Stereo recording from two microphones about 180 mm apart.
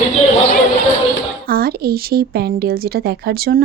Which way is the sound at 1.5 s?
55° right (ahead or behind).